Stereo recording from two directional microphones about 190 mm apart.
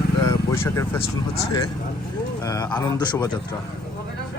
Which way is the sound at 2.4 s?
20° left (ahead or behind).